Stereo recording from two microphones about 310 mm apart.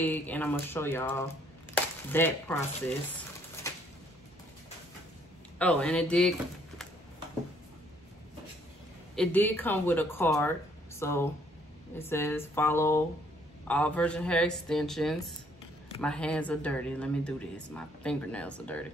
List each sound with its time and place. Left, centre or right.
0.0 s speech: centre
1.8 s a sound: centre
5.6 s speech: centre
9.1 s speech: centre